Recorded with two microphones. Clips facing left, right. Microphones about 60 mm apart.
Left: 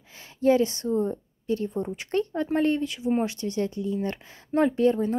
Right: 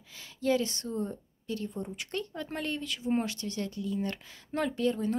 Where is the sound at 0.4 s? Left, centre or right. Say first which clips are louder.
Left 8 dB; left.